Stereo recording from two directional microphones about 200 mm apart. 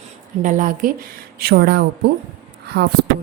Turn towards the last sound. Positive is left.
turn(degrees=-55)  # may be behind; listen again after turning